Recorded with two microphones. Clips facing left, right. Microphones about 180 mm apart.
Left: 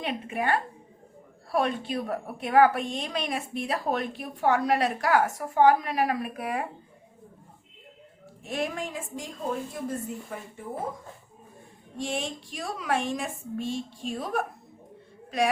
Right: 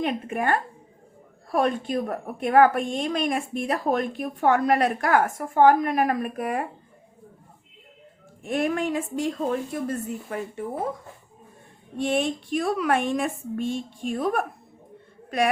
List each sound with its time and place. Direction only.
0.0 s a woman's voice: 50° right (ahead or behind)
8.4 s a woman's voice: 55° right (ahead or behind)
11.9 s a woman's voice: 60° right (ahead or behind)